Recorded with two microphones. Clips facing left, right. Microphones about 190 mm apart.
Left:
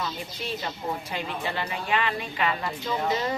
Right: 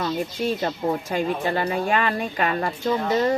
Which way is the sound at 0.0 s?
50° right (ahead or behind).